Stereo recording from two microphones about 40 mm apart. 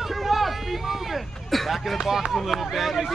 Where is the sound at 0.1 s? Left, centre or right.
Centre.